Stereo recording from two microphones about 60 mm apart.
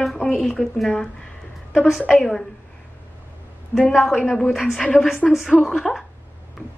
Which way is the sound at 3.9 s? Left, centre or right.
Centre.